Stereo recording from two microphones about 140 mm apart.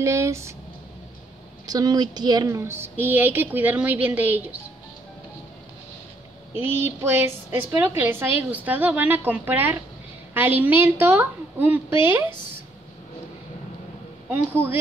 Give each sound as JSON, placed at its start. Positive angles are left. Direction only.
{"t": 0.0, "sound": "speech", "side_deg": -20}
{"t": 1.7, "sound": "a woman's voice", "side_deg": -30}
{"t": 6.6, "sound": "a woman's voice", "side_deg": -15}